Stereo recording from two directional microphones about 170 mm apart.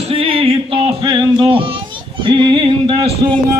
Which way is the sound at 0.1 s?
30° right (ahead or behind).